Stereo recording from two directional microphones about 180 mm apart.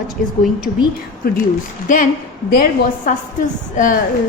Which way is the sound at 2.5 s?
50° left (ahead or behind).